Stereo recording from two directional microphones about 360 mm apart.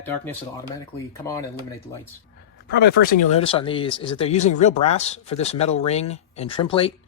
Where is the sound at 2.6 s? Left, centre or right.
Left.